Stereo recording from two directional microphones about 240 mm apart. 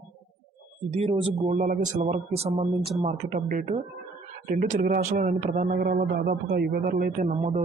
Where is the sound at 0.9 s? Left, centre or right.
Right.